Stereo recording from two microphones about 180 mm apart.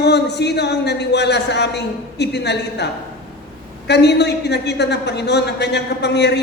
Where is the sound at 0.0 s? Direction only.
70° left (ahead or behind).